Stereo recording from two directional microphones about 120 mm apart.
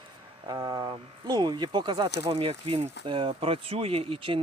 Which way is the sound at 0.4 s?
30° right (ahead or behind).